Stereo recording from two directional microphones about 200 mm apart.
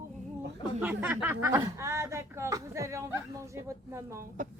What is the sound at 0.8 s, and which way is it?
Chuckle, 10° right (ahead or behind).